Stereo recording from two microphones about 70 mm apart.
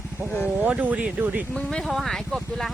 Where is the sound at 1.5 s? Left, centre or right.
Centre.